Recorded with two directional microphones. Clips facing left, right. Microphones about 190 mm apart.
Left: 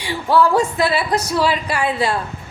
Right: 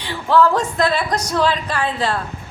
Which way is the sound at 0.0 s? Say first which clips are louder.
Even; 10° left (ahead or behind).